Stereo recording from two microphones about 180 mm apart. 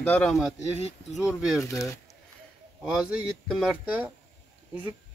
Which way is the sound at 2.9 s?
5° right (ahead or behind).